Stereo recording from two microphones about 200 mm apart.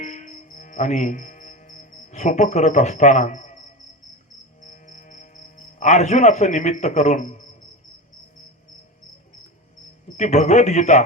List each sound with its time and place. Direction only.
0.0 s music: 35° left (ahead or behind)
4.6 s music: 40° left (ahead or behind)
10.2 s a man's voice: 35° left (ahead or behind)